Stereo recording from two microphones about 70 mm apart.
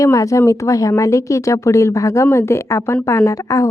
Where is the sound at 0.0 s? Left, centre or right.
Left.